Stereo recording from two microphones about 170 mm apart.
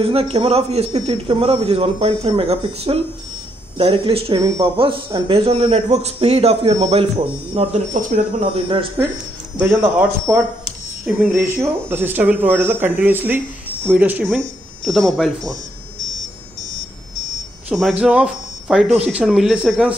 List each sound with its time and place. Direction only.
0.0 s speech: 35° right (ahead or behind)
7.9 s speech: 50° right (ahead or behind)
8.5 s speech: 30° right (ahead or behind)
9.8 s speech: 15° right (ahead or behind)
11.1 s speech: centre (ahead or behind)
11.3 s speech: 15° right (ahead or behind)
17.6 s speech: 5° right (ahead or behind)